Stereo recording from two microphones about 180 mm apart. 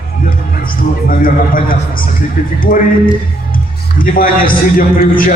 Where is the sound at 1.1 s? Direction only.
50° left (ahead or behind).